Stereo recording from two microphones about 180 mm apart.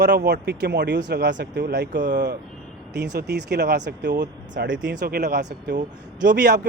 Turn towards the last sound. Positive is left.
turn(degrees=-55)  # may be behind; listen again after turning